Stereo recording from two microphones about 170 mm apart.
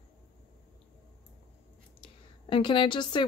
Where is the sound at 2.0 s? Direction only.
30° left (ahead or behind).